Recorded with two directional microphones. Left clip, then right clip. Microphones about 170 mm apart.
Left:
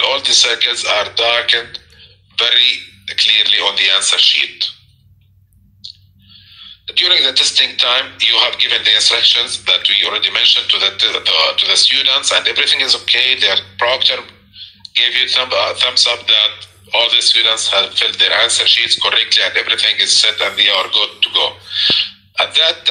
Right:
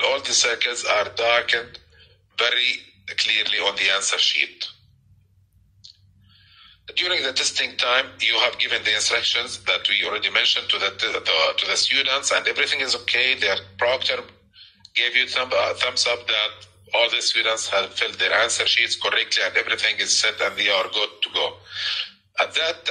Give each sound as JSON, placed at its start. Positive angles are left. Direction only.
{"t": 0.0, "sound": "a man's voice", "side_deg": -55}
{"t": 7.0, "sound": "a man's voice", "side_deg": -55}